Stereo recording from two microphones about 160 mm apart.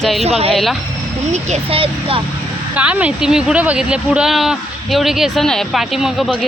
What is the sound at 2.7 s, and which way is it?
Speech, 10° right (ahead or behind).